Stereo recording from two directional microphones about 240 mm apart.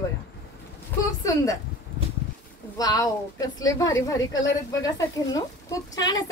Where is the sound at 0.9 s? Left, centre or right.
Centre.